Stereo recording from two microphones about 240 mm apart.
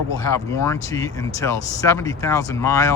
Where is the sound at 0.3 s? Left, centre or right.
Centre.